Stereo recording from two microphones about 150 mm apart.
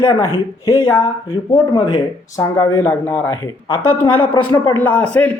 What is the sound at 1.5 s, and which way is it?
A man's voice, 30° left (ahead or behind).